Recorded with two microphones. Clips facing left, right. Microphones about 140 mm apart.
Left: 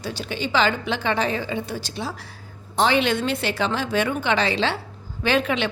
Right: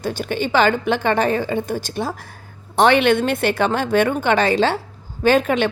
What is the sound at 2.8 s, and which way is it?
A woman's voice, 60° right (ahead or behind).